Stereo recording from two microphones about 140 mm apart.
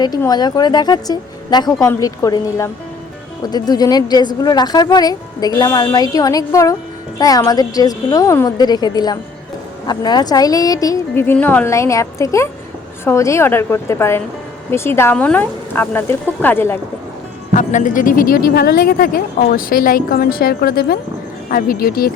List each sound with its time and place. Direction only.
0.3 s speech: 30° left (ahead or behind)
17.5 s speech: 60° left (ahead or behind); by 22.1 s 90° left